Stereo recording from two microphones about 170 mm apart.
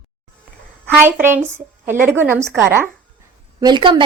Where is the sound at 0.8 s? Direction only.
10° right (ahead or behind).